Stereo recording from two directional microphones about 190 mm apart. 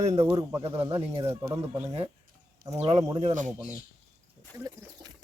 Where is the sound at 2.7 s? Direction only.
35° right (ahead or behind).